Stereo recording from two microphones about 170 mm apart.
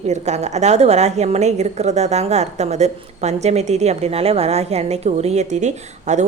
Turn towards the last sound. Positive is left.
turn(degrees=-45)  # may be behind; listen again after turning